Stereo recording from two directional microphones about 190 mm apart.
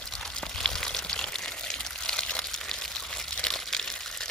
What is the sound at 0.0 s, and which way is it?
Pour, centre (ahead or behind).